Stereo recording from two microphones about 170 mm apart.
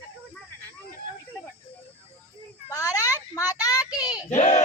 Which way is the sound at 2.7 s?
20° left (ahead or behind).